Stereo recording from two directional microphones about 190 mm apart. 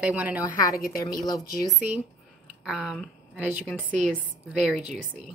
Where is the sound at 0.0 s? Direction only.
10° right (ahead or behind).